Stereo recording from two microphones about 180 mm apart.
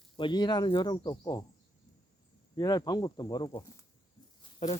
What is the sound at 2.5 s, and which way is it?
Speech, 20° left (ahead or behind).